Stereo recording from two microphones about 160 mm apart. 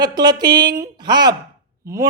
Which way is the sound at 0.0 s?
25° right (ahead or behind).